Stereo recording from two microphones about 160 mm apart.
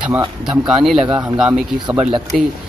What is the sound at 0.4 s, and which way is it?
Speech, 5° right (ahead or behind).